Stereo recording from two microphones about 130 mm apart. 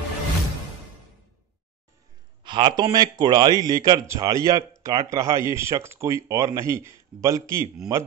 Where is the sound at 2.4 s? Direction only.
35° right (ahead or behind).